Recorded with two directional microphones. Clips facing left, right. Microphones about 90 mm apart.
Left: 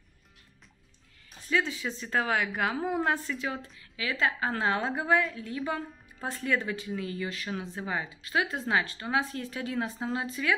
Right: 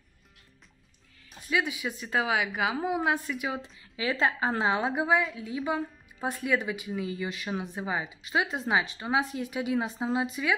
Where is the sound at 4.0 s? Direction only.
30° right (ahead or behind).